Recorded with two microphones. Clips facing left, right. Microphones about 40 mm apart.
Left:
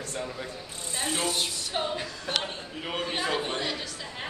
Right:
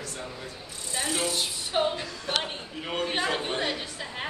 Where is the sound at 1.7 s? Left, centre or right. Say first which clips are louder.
Right 5 dB; centre.